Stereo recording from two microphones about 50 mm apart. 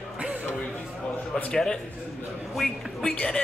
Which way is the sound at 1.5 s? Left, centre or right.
Centre.